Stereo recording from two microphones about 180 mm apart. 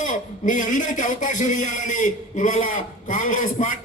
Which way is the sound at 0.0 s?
45° left (ahead or behind).